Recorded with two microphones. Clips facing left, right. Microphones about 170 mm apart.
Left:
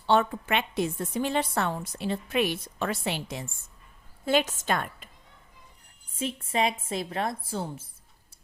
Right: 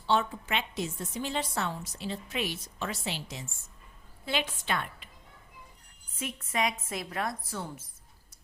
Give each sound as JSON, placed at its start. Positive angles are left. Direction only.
{"t": 0.1, "sound": "a woman's voice", "side_deg": 55}
{"t": 4.3, "sound": "a woman's voice", "side_deg": 45}
{"t": 6.1, "sound": "a woman's voice", "side_deg": 30}